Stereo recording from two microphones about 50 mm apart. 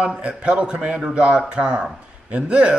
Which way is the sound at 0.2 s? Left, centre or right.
Right.